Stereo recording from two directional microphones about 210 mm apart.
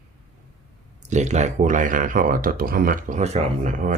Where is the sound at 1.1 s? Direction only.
35° right (ahead or behind).